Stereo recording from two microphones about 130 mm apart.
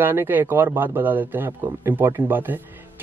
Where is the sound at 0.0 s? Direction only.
15° right (ahead or behind).